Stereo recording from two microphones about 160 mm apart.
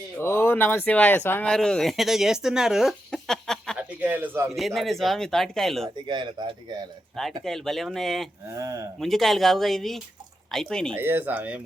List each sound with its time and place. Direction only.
0.2 s speech: 15° left (ahead or behind)
3.8 s a sound: 10° right (ahead or behind)
4.5 s speech: centre (ahead or behind)
6.1 s speech: 30° right (ahead or behind)
7.4 s speech: centre (ahead or behind)
8.4 s speech: 20° right (ahead or behind)
9.0 s speech: centre (ahead or behind)
10.9 s speech: 15° right (ahead or behind)